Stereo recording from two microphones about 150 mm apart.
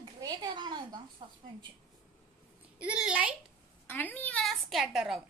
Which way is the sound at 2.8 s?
10° right (ahead or behind).